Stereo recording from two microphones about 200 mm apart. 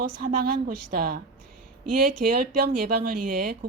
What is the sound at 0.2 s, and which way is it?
Speech, 45° right (ahead or behind).